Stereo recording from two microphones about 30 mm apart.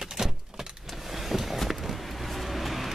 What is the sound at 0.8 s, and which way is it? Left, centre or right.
Vehicle, centre.